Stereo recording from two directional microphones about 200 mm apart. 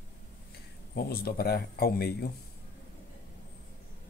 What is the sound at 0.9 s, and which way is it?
A man's voice, 50° left (ahead or behind).